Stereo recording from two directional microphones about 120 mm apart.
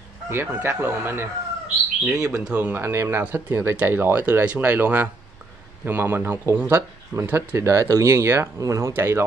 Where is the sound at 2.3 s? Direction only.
10° right (ahead or behind).